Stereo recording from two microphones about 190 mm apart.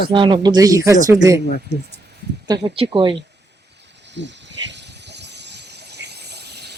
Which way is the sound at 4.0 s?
70° right (ahead or behind).